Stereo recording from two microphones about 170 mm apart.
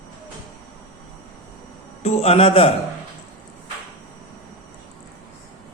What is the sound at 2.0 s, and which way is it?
Speech, 35° left (ahead or behind).